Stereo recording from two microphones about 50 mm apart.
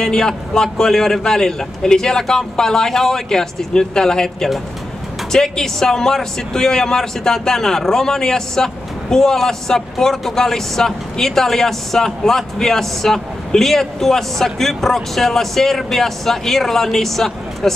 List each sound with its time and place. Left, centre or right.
0.0 s speech: centre